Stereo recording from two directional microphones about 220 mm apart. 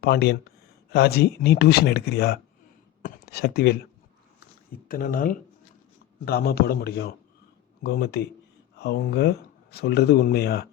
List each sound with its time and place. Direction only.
0.0 s speech: 45° left (ahead or behind)
4.9 s speech: 40° left (ahead or behind)